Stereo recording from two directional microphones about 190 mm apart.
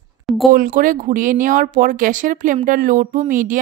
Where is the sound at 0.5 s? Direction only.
50° right (ahead or behind).